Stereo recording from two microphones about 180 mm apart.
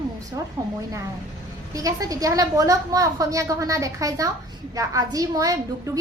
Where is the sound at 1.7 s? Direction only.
20° right (ahead or behind).